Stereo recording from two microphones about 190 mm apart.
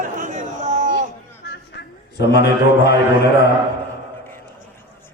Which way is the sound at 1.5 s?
65° left (ahead or behind).